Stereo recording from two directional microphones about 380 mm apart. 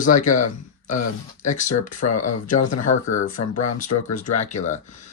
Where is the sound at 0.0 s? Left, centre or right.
Centre.